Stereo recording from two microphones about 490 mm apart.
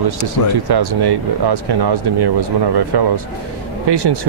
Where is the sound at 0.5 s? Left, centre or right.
Right.